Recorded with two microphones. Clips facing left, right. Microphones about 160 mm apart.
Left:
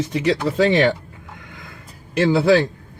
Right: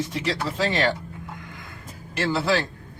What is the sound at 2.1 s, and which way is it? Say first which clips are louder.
Speech: left 8 dB; 60° left (ahead or behind).